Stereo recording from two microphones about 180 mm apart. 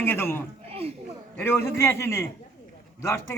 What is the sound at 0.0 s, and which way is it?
A man's voice, 10° left (ahead or behind).